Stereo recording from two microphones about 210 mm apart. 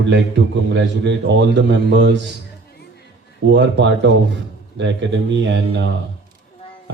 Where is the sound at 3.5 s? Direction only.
60° right (ahead or behind).